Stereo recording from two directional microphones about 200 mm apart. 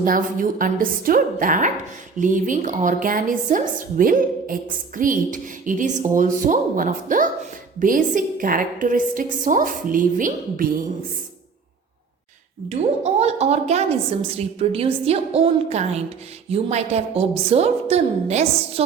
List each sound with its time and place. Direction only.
0.0 s a woman's voice: 45° right (ahead or behind)
12.6 s a woman's voice: 30° right (ahead or behind)